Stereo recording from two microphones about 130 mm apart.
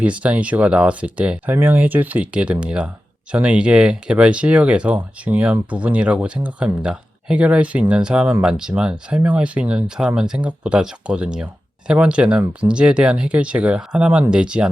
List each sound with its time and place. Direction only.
0.0 s speech: 10° right (ahead or behind)